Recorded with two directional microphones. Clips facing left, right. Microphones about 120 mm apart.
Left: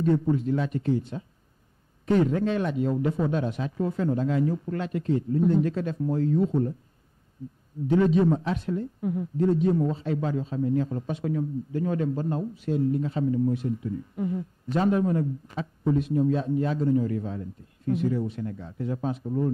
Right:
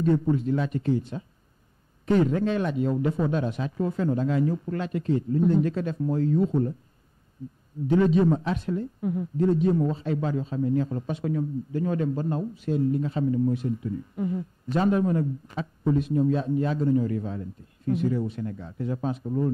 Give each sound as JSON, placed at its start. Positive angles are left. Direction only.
{"t": 0.1, "sound": "speech", "side_deg": -20}
{"t": 7.9, "sound": "speech", "side_deg": -15}